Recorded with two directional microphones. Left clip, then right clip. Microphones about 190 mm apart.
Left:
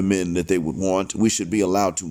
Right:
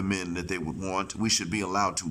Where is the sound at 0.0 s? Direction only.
20° left (ahead or behind).